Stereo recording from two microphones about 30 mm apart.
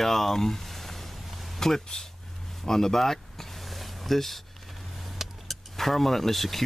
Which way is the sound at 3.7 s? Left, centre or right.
Centre.